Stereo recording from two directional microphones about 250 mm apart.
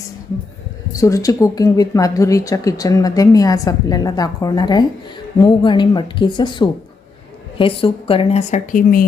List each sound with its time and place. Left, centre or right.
0.9 s a woman's voice: centre; by 9.0 s left